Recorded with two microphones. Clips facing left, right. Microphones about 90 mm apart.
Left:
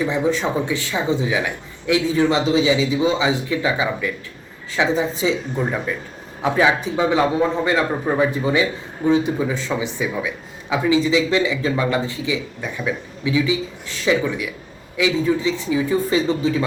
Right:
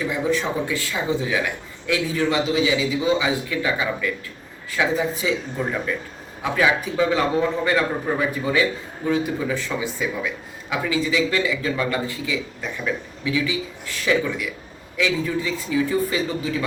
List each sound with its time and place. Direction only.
0.0 s speech: 25° left (ahead or behind)